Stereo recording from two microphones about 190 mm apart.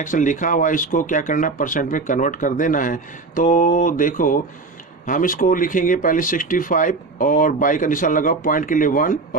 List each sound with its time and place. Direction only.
0.0 s speech: 40° left (ahead or behind)